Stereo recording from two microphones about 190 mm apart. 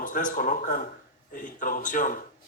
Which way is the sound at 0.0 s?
45° left (ahead or behind).